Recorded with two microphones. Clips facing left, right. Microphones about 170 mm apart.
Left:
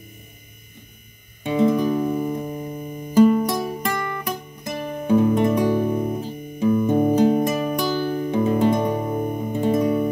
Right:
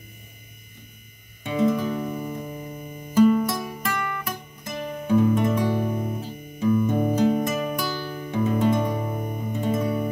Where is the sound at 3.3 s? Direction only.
30° left (ahead or behind).